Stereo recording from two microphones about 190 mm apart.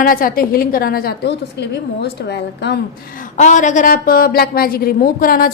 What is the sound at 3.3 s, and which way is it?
A woman's voice, 40° left (ahead or behind).